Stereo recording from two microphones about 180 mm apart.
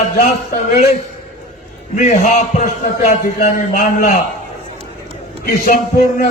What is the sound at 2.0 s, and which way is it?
Speech, 45° left (ahead or behind).